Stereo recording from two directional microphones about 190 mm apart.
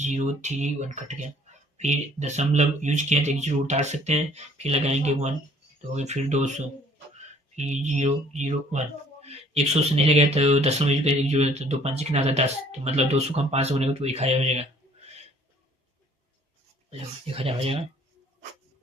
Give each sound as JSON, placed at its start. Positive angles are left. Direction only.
{"t": 0.0, "sound": "speech", "side_deg": -35}
{"t": 7.5, "sound": "speech", "side_deg": -40}
{"t": 16.9, "sound": "speech", "side_deg": -30}